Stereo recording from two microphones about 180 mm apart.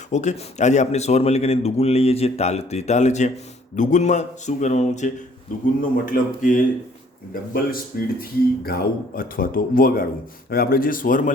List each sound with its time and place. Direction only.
0.1 s a man's voice: 40° left (ahead or behind)